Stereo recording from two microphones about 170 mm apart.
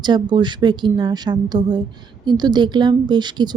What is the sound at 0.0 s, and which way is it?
A woman's voice, 25° right (ahead or behind).